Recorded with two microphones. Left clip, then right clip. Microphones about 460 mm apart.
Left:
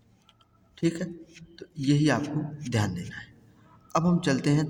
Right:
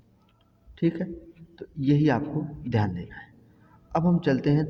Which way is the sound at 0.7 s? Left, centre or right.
Right.